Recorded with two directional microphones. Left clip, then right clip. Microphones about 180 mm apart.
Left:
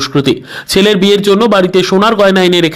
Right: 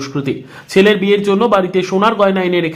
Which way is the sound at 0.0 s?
35° left (ahead or behind).